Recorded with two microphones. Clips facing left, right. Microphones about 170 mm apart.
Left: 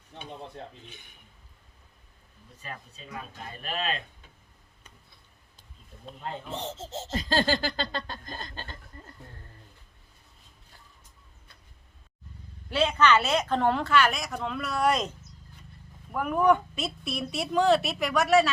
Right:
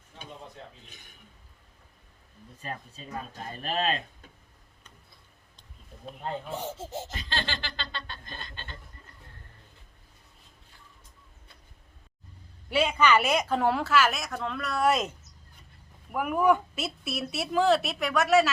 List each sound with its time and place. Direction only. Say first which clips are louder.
2.6 s speech: right 3 dB; 40° right (ahead or behind)
6.1 s speech: right 2 dB; 10° right (ahead or behind)
7.1 s chuckle: left 9 dB; 40° left (ahead or behind)
12.7 s a woman's voice: even; 10° right (ahead or behind)
16.1 s a woman's voice: left 1 dB; 5° right (ahead or behind)